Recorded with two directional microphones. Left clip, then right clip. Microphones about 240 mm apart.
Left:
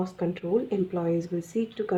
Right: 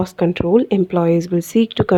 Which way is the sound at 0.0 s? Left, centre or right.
Right.